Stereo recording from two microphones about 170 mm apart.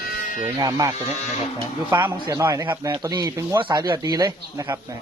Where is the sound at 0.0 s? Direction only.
50° left (ahead or behind).